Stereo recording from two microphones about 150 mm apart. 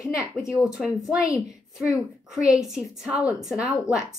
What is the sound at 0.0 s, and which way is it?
Speech, 20° left (ahead or behind).